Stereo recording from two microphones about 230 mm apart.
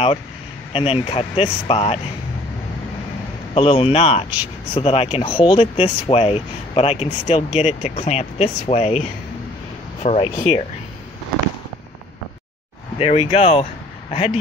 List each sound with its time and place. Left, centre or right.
0.7 s speech: left
3.5 s speech: left
10.0 s speech: left
13.0 s speech: left